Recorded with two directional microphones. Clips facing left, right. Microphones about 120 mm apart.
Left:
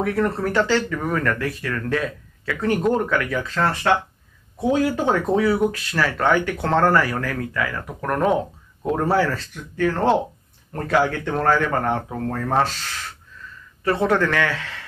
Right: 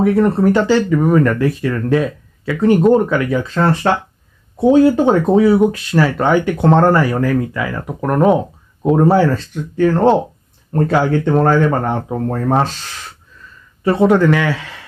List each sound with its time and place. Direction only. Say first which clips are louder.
0.0 s speech: right 9 dB; 20° right (ahead or behind)
13.8 s a man's voice: right 8 dB; 15° right (ahead or behind)